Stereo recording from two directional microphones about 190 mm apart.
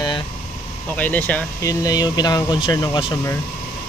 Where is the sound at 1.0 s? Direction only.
10° left (ahead or behind).